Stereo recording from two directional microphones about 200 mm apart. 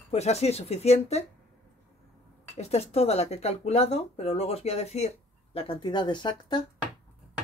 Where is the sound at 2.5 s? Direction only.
30° left (ahead or behind).